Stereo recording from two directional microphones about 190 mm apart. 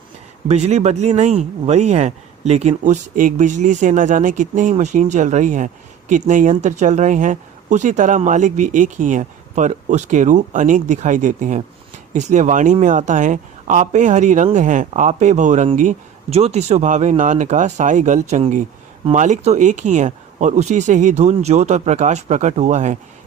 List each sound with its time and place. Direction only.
0.4 s speech: 35° right (ahead or behind)